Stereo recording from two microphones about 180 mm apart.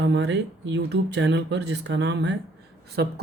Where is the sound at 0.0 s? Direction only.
80° right.